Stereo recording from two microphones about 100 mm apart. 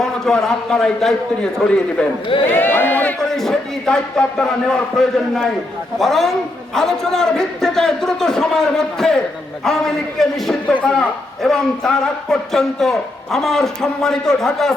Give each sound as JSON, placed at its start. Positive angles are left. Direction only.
{"t": 0.0, "sound": "a man's voice", "side_deg": 5}
{"t": 2.5, "sound": "speech", "side_deg": 20}
{"t": 3.2, "sound": "a man's voice", "side_deg": 5}